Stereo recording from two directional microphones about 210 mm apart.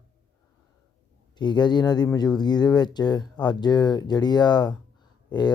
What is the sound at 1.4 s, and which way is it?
Speech, 20° left (ahead or behind).